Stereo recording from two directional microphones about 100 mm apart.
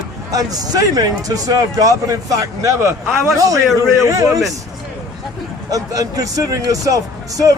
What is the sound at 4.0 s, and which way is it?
Speech, 35° right (ahead or behind).